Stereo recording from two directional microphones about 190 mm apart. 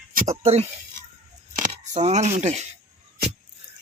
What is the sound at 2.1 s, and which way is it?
Speech, 35° right (ahead or behind).